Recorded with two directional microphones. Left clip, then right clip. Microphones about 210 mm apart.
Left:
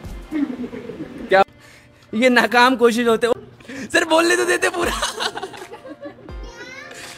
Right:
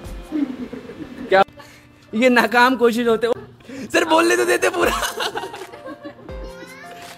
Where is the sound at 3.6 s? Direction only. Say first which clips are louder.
Even; centre (ahead or behind).